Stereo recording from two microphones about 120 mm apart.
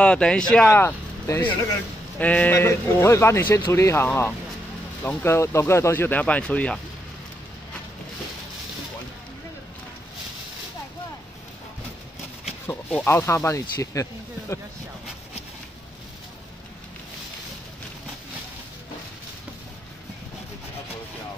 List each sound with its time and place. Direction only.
0.0 s speech: 10° left (ahead or behind)
0.7 s speech: 20° left (ahead or behind)
12.6 s speech: 15° left (ahead or behind)